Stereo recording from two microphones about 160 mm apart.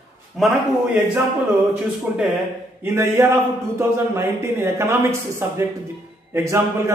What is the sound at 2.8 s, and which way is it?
A man's voice, 15° right (ahead or behind).